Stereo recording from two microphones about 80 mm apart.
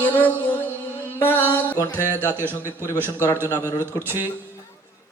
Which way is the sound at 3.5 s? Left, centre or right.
Left.